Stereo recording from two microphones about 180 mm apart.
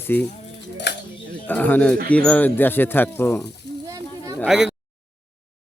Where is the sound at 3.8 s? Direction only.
20° right (ahead or behind).